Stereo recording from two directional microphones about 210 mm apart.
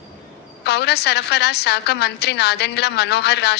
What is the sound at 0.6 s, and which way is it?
A woman's voice, 50° left (ahead or behind).